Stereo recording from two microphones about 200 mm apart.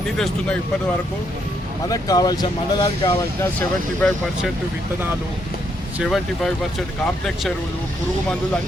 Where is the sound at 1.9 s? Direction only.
20° left (ahead or behind).